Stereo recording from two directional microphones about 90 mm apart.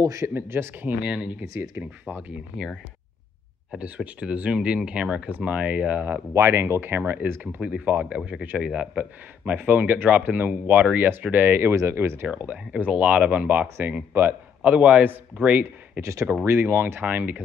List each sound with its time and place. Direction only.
0.0 s speech: 35° right (ahead or behind)
0.3 s speech: 25° right (ahead or behind)
1.0 s speech: 10° right (ahead or behind)
1.6 s speech: 20° right (ahead or behind)
3.7 s speech: 15° right (ahead or behind)
12.3 s speech: 15° right (ahead or behind)
16.0 s speech: 35° right (ahead or behind); by 17.4 s 20° right (ahead or behind)